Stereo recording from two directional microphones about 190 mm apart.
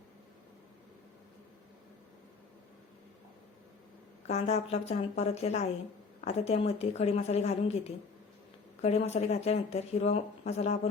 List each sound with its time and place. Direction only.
4.3 s speech: 35° left (ahead or behind)